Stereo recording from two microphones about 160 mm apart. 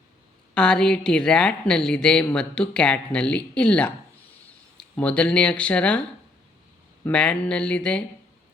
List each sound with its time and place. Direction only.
0.5 s a woman's voice: 5° left (ahead or behind)